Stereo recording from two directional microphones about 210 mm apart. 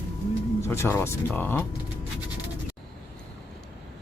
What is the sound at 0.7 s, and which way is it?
Speech, 10° left (ahead or behind).